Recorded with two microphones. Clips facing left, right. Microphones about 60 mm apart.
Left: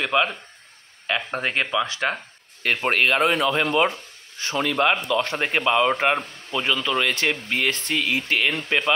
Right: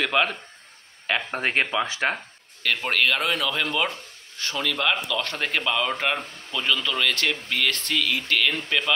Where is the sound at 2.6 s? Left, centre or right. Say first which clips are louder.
Left 2 dB; left.